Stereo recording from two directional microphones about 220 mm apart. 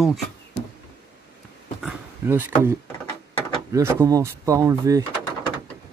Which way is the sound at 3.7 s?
15° right (ahead or behind).